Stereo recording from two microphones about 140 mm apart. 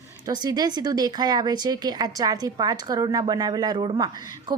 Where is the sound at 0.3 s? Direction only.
30° right (ahead or behind).